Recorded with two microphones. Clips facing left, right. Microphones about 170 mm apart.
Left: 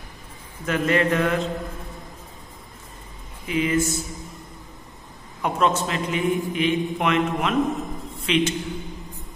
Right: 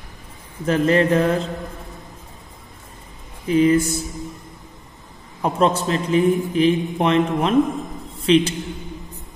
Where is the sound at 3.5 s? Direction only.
35° right (ahead or behind).